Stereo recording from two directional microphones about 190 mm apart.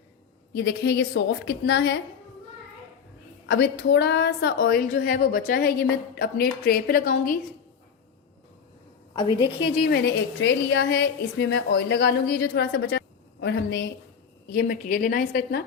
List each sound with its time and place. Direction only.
0.5 s a woman's voice: 65° left (ahead or behind)
3.5 s a woman's voice: 60° left (ahead or behind)
9.1 s a woman's voice: 25° left (ahead or behind)
9.9 s a woman's voice: 60° left (ahead or behind)
14.5 s a woman's voice: 50° left (ahead or behind)